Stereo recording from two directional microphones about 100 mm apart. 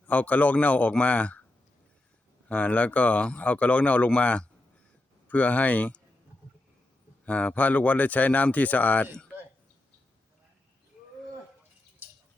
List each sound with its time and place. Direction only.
0.0 s speech: 15° left (ahead or behind)
2.5 s speech: 15° left (ahead or behind)
7.3 s speech: 15° left (ahead or behind)